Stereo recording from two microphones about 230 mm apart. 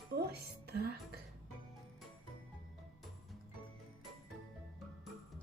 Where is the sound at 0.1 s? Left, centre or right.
Right.